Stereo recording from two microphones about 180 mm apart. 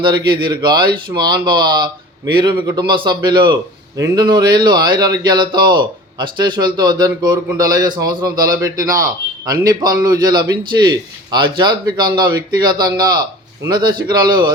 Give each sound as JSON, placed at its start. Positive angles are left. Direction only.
{"t": 0.0, "sound": "a man's voice", "side_deg": -25}